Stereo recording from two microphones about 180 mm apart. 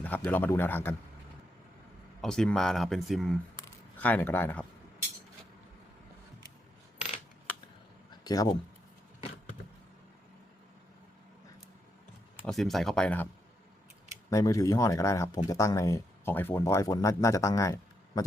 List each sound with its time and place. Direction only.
0.0 s speech: 10° left (ahead or behind)
2.2 s speech: 5° left (ahead or behind)
8.1 s a sound: 20° left (ahead or behind)
12.4 s speech: centre (ahead or behind)
14.3 s speech: 20° left (ahead or behind)